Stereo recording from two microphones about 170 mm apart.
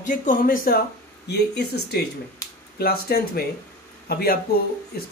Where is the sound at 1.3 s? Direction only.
75° left (ahead or behind).